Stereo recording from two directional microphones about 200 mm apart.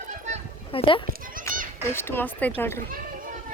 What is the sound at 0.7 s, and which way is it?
Speech, 25° left (ahead or behind).